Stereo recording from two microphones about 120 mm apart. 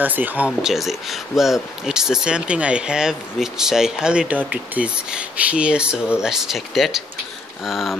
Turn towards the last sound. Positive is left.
turn(degrees=0)  # may be behind; listen again after turning